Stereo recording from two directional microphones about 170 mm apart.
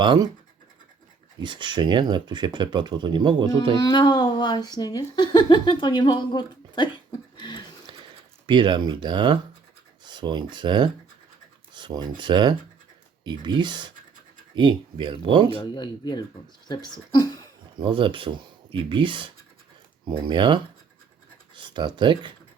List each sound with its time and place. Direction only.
0.0 s speech: 25° right (ahead or behind)
1.4 s speech: 25° right (ahead or behind)
3.8 s speech: 25° left (ahead or behind)
8.4 s speech: 25° right (ahead or behind)
15.5 s speech: 25° left (ahead or behind)
17.7 s speech: 30° right (ahead or behind)